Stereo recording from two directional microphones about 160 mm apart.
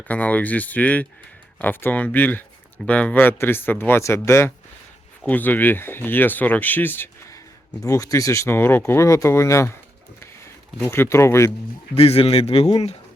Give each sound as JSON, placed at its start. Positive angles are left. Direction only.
{"t": 0.1, "sound": "speech", "side_deg": 10}
{"t": 10.8, "sound": "speech", "side_deg": 15}
{"t": 11.9, "sound": "speech", "side_deg": 40}